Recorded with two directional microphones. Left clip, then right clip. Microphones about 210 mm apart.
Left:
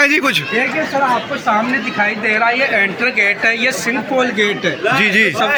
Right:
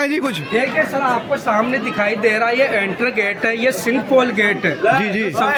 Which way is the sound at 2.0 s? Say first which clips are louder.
Left 2 dB; 45° right (ahead or behind).